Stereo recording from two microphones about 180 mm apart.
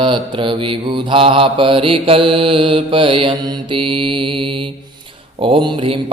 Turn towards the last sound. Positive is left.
turn(degrees=-30)  # may be behind; listen again after turning